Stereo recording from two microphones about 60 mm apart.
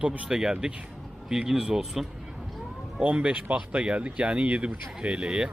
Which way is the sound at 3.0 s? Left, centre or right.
Right.